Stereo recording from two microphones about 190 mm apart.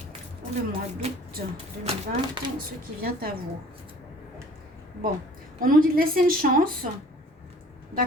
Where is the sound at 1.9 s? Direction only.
35° right (ahead or behind).